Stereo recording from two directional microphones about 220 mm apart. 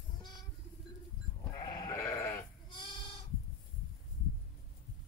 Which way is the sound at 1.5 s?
20° left (ahead or behind).